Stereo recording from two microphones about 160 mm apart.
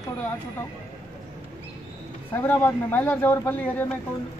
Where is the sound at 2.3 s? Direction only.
10° left (ahead or behind).